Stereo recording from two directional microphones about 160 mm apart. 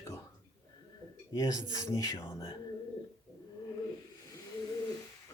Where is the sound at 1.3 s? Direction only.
20° left (ahead or behind).